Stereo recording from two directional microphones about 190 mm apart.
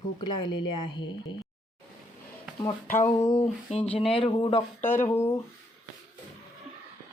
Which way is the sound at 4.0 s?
30° left (ahead or behind).